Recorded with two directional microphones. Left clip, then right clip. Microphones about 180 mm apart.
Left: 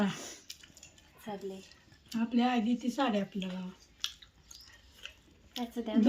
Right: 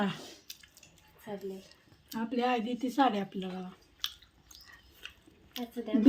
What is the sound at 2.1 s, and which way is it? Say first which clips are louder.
Speech: right 1 dB; 70° right (ahead or behind).